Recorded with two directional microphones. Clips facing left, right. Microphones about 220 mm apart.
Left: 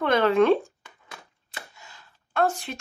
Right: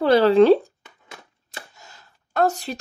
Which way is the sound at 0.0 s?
35° right (ahead or behind).